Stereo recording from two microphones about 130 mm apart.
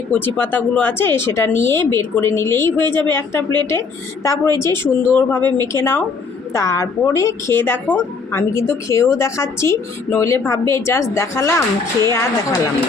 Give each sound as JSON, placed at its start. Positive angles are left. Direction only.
{"t": 0.1, "sound": "a woman's voice", "side_deg": 15}